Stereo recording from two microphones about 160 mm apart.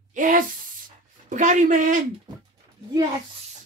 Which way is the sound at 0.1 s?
55° right (ahead or behind).